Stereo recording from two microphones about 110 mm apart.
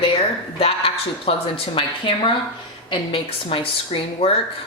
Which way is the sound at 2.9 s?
50° left (ahead or behind).